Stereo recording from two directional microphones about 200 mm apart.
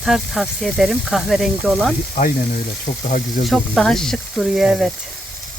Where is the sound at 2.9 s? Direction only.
35° left (ahead or behind).